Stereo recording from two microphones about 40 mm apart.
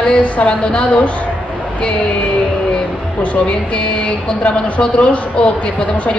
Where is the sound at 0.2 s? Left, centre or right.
Left.